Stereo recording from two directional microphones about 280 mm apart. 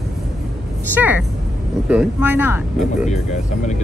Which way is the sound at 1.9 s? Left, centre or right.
Centre.